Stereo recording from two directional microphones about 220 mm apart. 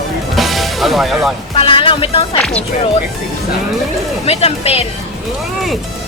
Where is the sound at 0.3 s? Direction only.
Centre (ahead or behind).